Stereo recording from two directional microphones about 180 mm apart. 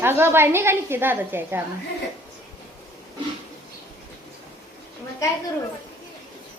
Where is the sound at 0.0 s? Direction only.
10° right (ahead or behind).